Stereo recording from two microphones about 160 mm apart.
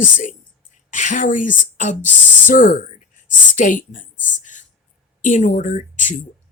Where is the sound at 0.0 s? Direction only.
55° left (ahead or behind).